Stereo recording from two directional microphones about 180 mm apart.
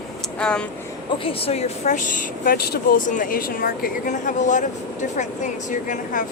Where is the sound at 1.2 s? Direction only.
30° left (ahead or behind).